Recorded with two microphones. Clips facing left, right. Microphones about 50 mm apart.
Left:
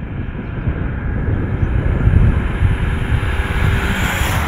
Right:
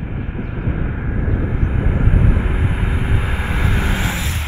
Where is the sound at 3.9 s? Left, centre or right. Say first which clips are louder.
Left 3 dB; left.